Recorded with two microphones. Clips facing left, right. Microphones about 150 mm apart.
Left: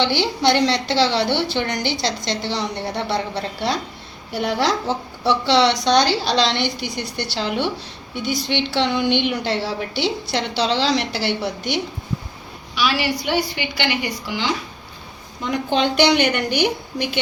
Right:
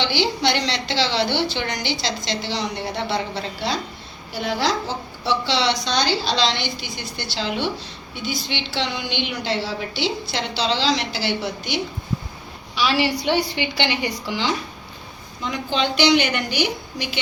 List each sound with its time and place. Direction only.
0.0 s a woman's voice: 55° left (ahead or behind)
12.7 s a woman's voice: 25° right (ahead or behind)
15.4 s a woman's voice: 55° left (ahead or behind)